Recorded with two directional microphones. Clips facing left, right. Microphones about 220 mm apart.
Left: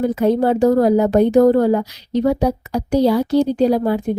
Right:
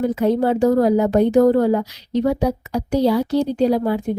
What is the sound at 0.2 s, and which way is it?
Speech, 40° left (ahead or behind).